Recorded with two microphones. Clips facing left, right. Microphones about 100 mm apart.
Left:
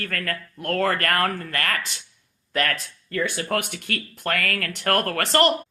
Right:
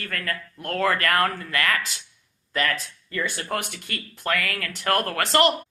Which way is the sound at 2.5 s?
55° left (ahead or behind).